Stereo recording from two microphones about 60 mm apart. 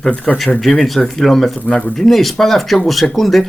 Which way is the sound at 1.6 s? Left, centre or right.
Left.